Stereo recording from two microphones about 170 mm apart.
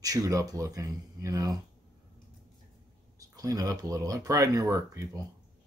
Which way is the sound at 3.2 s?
20° right (ahead or behind).